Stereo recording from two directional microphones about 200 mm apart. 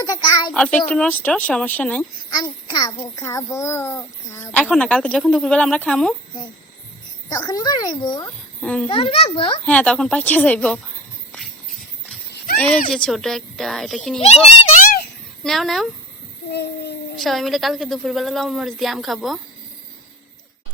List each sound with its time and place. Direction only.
0.0 s child singing: 20° left (ahead or behind)
0.5 s a child's voice: 5° left (ahead or behind)
2.3 s a child's voice: 20° left (ahead or behind); by 6.1 s 5° left (ahead or behind)
7.3 s speech: 20° left (ahead or behind)
8.6 s a woman's voice: 5° left (ahead or behind)
8.9 s speech: 30° left (ahead or behind)
9.6 s a woman's voice: 5° left (ahead or behind)
12.5 s a woman's voice: 5° left (ahead or behind)
14.2 s a child's voice: 30° left (ahead or behind)
15.4 s a woman's voice: centre (ahead or behind)
16.5 s a sound: 55° left (ahead or behind)
17.2 s a woman's voice: centre (ahead or behind)